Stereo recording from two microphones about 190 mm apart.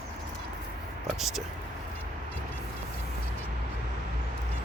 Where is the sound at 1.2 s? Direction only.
Centre (ahead or behind).